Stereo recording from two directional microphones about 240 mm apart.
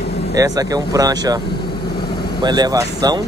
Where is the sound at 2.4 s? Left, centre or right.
Centre.